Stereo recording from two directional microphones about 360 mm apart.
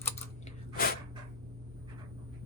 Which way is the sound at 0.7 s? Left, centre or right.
Left.